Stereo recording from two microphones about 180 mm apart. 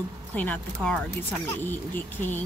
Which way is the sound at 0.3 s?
10° left (ahead or behind).